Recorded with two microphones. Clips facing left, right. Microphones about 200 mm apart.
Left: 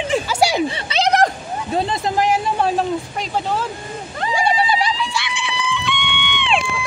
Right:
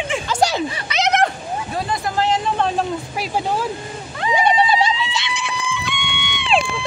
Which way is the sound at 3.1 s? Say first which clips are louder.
Even; 10° right (ahead or behind).